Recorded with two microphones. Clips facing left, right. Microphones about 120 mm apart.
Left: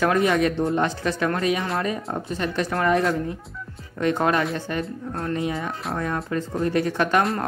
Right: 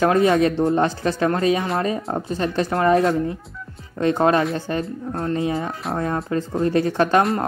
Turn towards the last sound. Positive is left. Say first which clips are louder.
# right 3 dB
turn(degrees=-30)  # may be behind; listen again after turning